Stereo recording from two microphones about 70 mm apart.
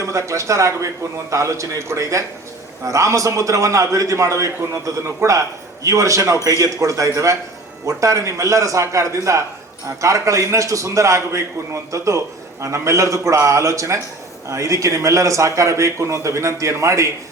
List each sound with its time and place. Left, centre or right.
0.0 s a man's voice: right